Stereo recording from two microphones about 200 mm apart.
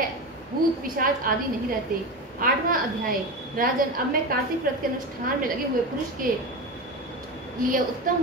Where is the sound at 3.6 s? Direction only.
45° right (ahead or behind).